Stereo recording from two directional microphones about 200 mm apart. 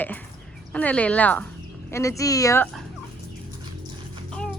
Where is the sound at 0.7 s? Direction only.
5° left (ahead or behind).